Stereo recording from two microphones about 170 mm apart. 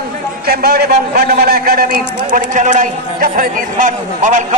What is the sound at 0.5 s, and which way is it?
A man's voice, 65° right (ahead or behind).